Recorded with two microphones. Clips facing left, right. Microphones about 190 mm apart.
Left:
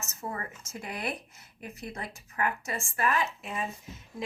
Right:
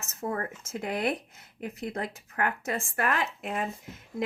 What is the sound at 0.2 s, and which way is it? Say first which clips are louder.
Speech: right 6 dB; 55° right (ahead or behind).